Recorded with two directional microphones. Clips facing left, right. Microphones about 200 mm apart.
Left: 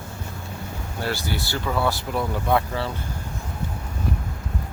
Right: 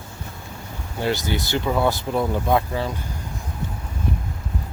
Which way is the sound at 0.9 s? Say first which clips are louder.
Right 4 dB; 20° right (ahead or behind).